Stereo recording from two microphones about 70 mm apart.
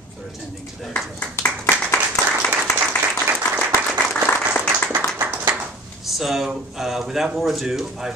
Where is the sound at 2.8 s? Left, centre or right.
Right.